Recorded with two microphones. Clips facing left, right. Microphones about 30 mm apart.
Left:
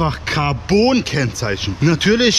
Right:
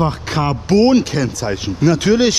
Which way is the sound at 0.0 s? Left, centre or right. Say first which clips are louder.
Right 1 dB; centre.